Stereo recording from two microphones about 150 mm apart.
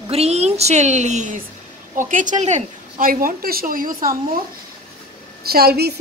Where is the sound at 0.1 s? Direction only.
45° right (ahead or behind).